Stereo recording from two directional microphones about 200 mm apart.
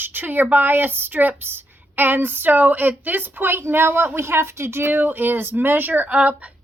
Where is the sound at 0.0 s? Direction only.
10° right (ahead or behind).